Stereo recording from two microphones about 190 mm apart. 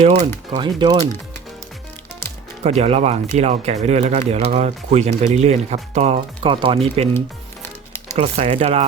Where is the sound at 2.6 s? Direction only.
35° right (ahead or behind).